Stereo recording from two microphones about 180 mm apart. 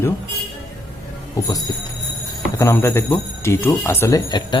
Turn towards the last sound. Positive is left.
turn(degrees=25)  # may be behind; listen again after turning